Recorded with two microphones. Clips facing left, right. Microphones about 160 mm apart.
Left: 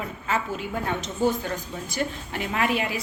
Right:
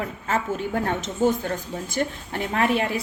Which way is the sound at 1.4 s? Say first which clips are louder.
Right 3 dB; 50° right (ahead or behind).